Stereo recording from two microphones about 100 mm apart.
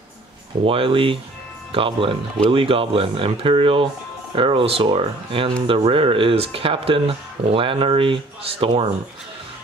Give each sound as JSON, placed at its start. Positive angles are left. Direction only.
{"t": 0.7, "sound": "speech", "side_deg": -65}